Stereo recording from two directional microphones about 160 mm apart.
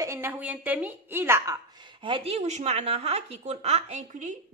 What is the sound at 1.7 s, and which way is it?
A woman's voice, 30° right (ahead or behind).